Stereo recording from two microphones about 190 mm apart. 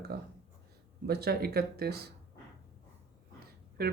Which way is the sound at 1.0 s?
55° right (ahead or behind).